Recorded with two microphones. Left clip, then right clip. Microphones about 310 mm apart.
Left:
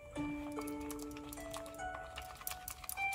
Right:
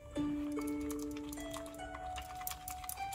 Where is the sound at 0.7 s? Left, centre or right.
Centre.